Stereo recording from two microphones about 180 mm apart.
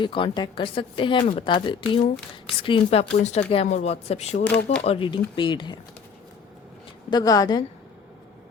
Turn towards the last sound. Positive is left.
turn(degrees=20)  # may be behind; listen again after turning